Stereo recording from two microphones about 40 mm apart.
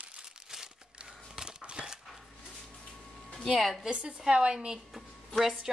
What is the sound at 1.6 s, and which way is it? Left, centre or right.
Cutlery, right.